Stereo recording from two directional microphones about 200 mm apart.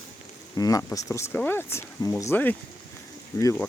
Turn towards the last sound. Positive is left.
turn(degrees=15)  # may be behind; listen again after turning